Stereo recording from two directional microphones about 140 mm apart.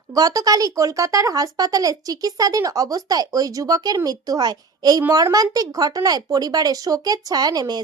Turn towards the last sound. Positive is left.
turn(degrees=-30)  # may be behind; listen again after turning